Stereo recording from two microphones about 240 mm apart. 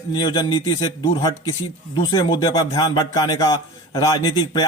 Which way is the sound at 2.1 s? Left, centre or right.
Left.